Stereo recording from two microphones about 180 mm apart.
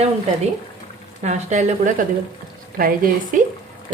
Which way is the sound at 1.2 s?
40° right (ahead or behind).